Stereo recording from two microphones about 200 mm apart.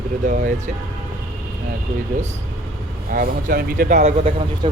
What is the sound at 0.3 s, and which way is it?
Speech, 40° right (ahead or behind).